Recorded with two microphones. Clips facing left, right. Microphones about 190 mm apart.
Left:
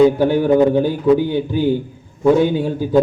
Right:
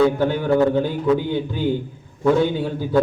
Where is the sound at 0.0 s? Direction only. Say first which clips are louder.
Left 5 dB; 15° left (ahead or behind).